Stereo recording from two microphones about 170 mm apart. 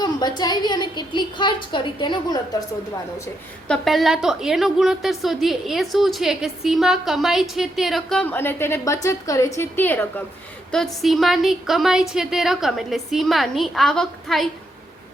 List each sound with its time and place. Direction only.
0.0 s a woman's voice: 25° left (ahead or behind)
3.7 s a woman's voice: centre (ahead or behind)